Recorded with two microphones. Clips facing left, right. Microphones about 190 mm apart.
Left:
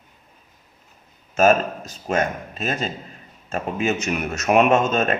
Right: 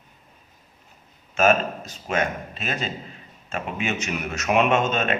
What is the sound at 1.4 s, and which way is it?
Speech, 40° left (ahead or behind).